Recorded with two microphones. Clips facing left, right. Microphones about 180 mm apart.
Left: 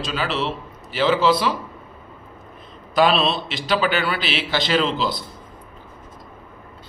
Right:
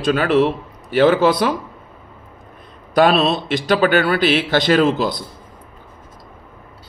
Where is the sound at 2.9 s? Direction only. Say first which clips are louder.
Right 4 dB; 50° right (ahead or behind).